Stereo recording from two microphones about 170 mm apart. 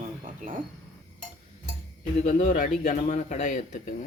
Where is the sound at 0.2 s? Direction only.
50° right (ahead or behind).